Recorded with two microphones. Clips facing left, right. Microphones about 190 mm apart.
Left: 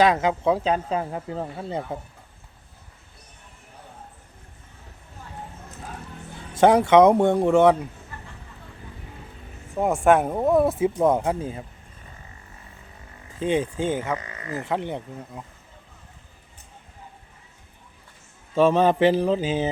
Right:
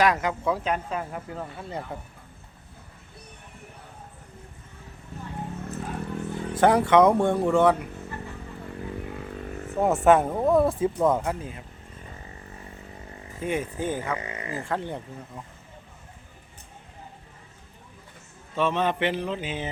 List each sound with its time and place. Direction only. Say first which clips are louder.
0.0 s speech: left 4 dB; 25° left (ahead or behind)
6.6 s speech: left 3 dB; 20° left (ahead or behind)
9.7 s speech: even; centre (ahead or behind)
10.2 s speech: left 1 dB; 15° left (ahead or behind)
10.5 s speech: left 2 dB; 5° left (ahead or behind); by 11.6 s 25° left (ahead or behind)
13.4 s speech: left 5 dB; 25° left (ahead or behind)
14.3 s speech: left 1 dB; 15° right (ahead or behind)
14.6 s speech: left 4 dB; 20° left (ahead or behind)
18.5 s a man's voice: left 7 dB; 35° left (ahead or behind)